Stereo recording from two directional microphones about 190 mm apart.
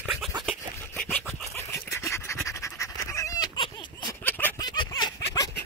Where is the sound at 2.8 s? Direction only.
15° left (ahead or behind).